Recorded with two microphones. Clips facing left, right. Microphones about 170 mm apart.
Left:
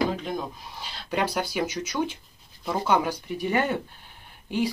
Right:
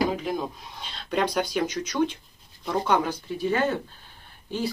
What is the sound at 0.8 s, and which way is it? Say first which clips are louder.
Speech: right 1 dB; 5° left (ahead or behind).